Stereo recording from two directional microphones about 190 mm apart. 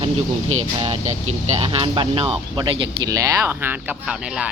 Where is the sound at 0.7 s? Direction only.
30° right (ahead or behind); by 4.5 s 5° right (ahead or behind).